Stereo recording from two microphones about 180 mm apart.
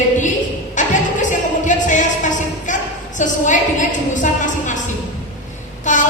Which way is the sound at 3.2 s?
45° left (ahead or behind).